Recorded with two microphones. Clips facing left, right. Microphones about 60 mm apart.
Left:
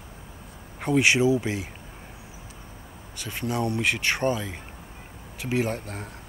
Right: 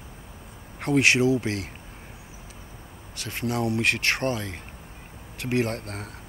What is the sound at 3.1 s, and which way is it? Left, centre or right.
Speech, centre.